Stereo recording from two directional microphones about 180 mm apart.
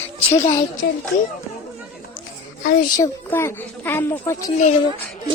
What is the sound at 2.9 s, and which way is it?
Speech, 15° left (ahead or behind).